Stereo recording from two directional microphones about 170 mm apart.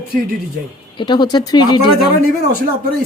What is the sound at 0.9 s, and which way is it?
Speech, 25° left (ahead or behind).